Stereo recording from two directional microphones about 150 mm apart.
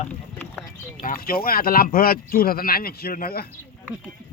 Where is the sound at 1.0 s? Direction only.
70° left (ahead or behind); by 3.5 s 90° left.